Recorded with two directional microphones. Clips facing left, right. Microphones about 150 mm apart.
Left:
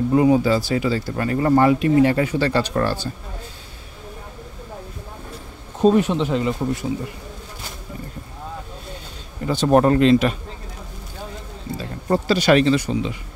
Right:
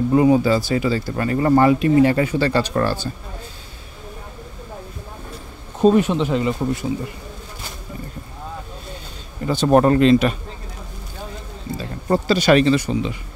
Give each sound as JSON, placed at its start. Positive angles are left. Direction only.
{"t": 0.1, "sound": "speech", "side_deg": -35}
{"t": 5.8, "sound": "speech", "side_deg": -10}
{"t": 9.5, "sound": "speech", "side_deg": -45}
{"t": 11.8, "sound": "speech", "side_deg": -35}